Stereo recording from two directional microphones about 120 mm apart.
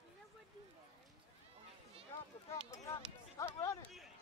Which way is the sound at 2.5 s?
25° left (ahead or behind).